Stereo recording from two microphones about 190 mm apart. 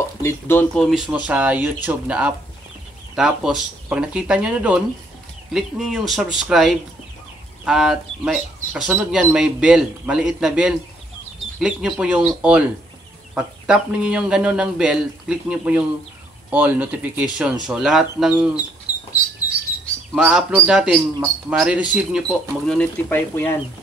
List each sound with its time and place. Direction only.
0.2 s speech: 10° left (ahead or behind)
0.8 s speech: 5° right (ahead or behind)
18.9 s bird: 55° left (ahead or behind)
20.2 s speech: centre (ahead or behind)
22.7 s speech: 10° left (ahead or behind)